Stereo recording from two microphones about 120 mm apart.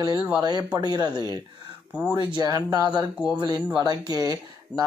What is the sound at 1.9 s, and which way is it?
Speech, 10° right (ahead or behind).